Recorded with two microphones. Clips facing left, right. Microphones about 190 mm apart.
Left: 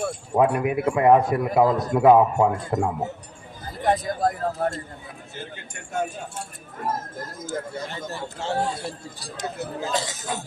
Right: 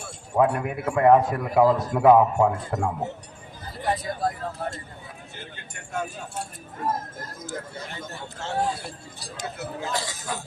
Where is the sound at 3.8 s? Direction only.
45° left (ahead or behind).